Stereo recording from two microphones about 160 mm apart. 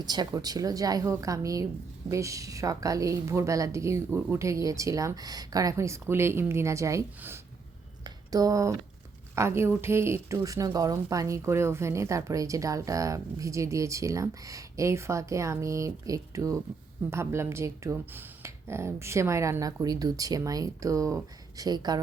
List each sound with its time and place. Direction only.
0.0 s speech: 25° right (ahead or behind)
8.0 s a sound: 25° right (ahead or behind)
9.3 s speech: 15° right (ahead or behind)